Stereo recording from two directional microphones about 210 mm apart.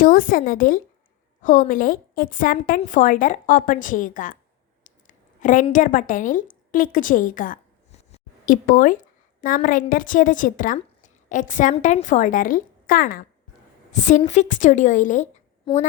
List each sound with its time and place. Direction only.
0.0 s a woman's voice: 40° left (ahead or behind)
8.1 s a sound: 40° left (ahead or behind)
9.6 s a woman's voice: 40° left (ahead or behind)